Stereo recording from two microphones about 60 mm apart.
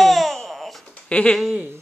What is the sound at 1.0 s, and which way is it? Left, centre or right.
Speech, left.